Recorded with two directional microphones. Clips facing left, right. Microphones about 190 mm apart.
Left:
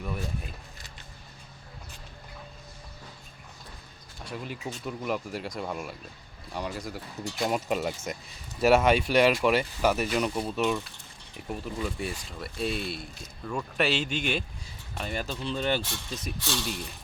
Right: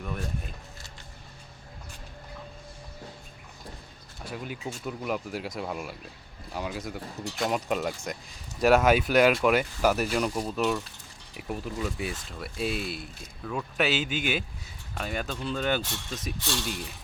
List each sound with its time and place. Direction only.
0.0 s speech: 5° left (ahead or behind)
4.2 s speech: centre (ahead or behind)